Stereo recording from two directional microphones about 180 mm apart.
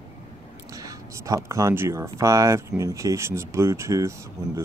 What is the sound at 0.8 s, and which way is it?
Speech, 15° right (ahead or behind).